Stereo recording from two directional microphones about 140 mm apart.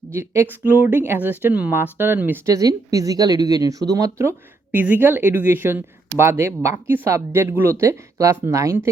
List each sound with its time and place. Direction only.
0.1 s speech: 15° right (ahead or behind)
2.5 s speech: 25° right (ahead or behind)